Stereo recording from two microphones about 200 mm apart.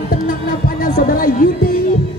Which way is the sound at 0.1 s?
45° left (ahead or behind).